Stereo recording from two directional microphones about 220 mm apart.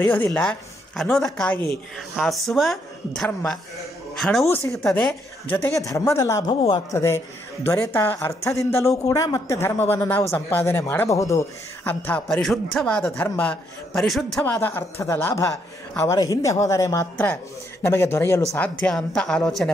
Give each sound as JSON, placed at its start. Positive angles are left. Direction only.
{"t": 0.0, "sound": "a man's voice", "side_deg": 10}